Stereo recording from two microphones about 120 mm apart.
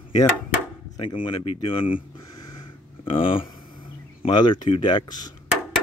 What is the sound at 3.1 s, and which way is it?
Speech, 50° left (ahead or behind).